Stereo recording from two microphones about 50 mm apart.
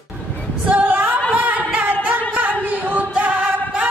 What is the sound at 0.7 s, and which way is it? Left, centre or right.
Female singing, right.